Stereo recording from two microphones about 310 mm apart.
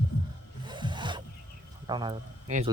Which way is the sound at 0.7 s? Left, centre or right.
Centre.